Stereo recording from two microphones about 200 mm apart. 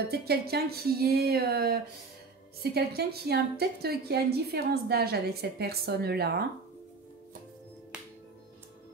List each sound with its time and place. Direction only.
0.1 s a woman's voice: 50° right (ahead or behind)